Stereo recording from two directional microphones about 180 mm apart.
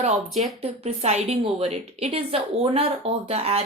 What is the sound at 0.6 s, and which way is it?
A woman's voice, 35° right (ahead or behind).